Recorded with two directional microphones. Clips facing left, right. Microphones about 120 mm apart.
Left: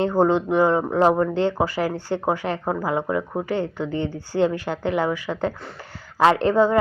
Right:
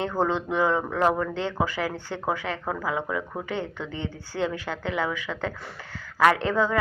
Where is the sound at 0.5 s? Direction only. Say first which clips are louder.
Left 4 dB; 45° left (ahead or behind).